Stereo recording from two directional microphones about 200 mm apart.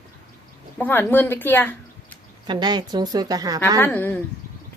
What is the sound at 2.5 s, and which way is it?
A woman's voice, 20° right (ahead or behind).